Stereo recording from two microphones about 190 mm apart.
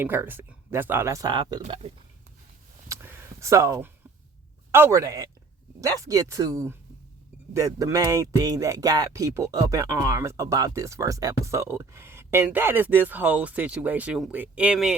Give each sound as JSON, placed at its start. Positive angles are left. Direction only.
{"t": 0.0, "sound": "speech", "side_deg": -10}
{"t": 2.9, "sound": "a sound", "side_deg": -15}
{"t": 4.7, "sound": "speech", "side_deg": -15}